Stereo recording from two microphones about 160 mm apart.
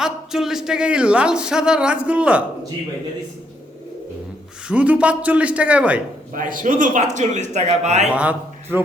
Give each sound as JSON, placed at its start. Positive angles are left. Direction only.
{"t": 0.0, "sound": "speech", "side_deg": -5}
{"t": 4.7, "sound": "a man's voice", "side_deg": -10}
{"t": 6.3, "sound": "speech", "side_deg": -55}
{"t": 8.1, "sound": "a man's voice", "side_deg": -10}